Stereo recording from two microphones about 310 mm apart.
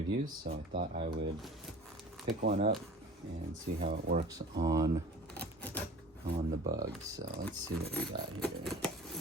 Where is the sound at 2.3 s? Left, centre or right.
Right.